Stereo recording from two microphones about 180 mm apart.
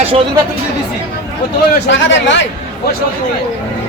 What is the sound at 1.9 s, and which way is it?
Speech, 90° left.